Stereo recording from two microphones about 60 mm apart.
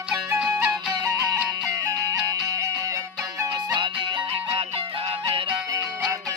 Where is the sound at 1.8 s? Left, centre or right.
Right.